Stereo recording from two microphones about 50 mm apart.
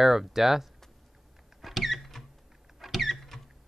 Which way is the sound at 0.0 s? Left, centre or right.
Centre.